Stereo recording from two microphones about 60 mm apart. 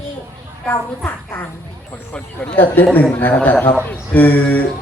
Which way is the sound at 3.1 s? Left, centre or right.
Left.